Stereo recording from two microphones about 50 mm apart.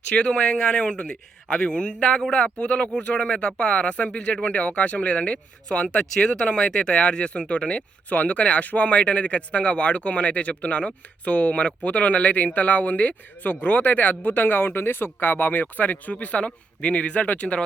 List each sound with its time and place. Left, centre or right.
0.1 s speech: left
8.1 s speech: left